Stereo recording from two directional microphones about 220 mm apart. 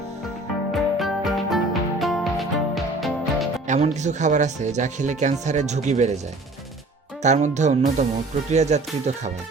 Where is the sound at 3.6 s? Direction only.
30° right (ahead or behind).